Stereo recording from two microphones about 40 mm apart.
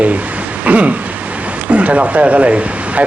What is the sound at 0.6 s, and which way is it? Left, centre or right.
Speech, right.